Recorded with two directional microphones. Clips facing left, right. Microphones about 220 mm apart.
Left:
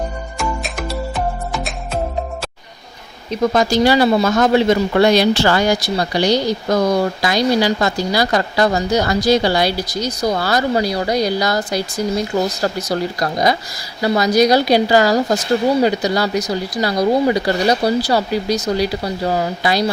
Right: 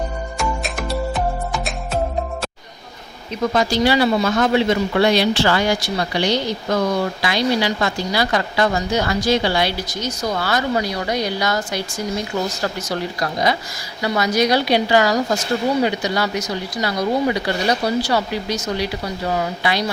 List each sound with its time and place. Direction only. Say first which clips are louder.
0.3 s music: left 1 dB; centre (ahead or behind)
3.5 s speech: left 3 dB; 45° left (ahead or behind)